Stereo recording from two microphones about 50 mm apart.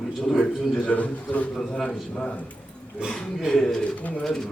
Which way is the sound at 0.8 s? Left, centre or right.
Left.